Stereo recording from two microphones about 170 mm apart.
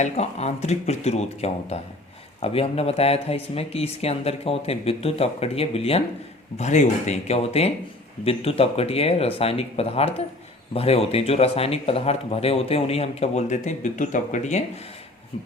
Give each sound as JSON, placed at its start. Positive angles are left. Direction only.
{"t": 0.0, "sound": "speech", "side_deg": 40}